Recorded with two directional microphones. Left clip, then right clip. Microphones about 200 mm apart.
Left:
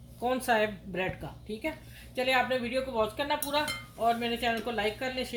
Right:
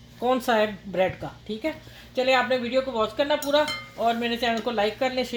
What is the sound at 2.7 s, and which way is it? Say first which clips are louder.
Speech: right 5 dB; 35° right (ahead or behind).